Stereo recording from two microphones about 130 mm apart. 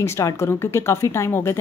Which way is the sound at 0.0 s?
20° left (ahead or behind).